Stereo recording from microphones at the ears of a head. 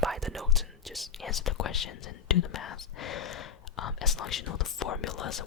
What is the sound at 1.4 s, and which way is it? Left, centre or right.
Speech, left.